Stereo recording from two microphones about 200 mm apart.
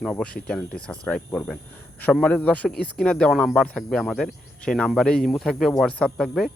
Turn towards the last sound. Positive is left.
turn(degrees=5)  # may be behind; listen again after turning